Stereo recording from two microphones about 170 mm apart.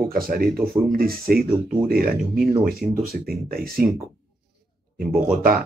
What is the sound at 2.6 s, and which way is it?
Speech, 60° right (ahead or behind).